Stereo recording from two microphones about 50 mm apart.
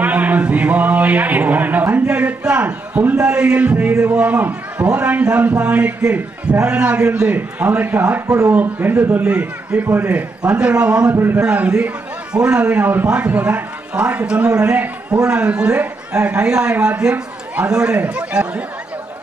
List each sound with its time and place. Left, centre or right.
0.0 s a sound: right
0.4 s speech: right
3.2 s a man's voice: right
9.2 s a man's voice: right
11.1 s speech: right
11.5 s a man's voice: right
17.9 s a man's voice: right